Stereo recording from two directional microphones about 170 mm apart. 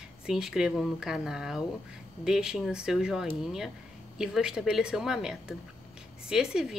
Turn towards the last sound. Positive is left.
turn(degrees=-5)  # may be behind; listen again after turning